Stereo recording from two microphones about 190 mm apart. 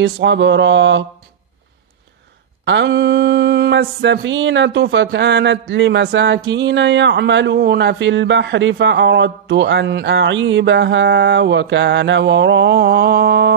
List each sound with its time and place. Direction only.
0.0 s mantra: 70° right (ahead or behind)
2.6 s mantra: 70° right (ahead or behind)